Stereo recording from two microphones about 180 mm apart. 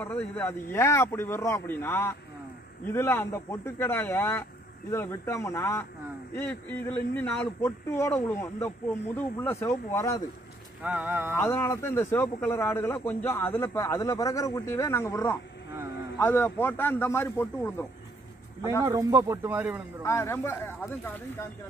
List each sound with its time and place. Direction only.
0.0 s speech: 10° left (ahead or behind)
10.8 s speech: 10° right (ahead or behind)
11.3 s speech: 15° left (ahead or behind)
18.9 s speech: 20° right (ahead or behind)
20.0 s speech: 15° left (ahead or behind)